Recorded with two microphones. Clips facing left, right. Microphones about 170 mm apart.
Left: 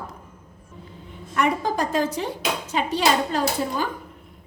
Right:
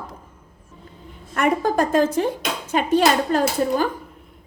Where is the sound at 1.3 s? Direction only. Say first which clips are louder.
Right 3 dB; 50° right (ahead or behind).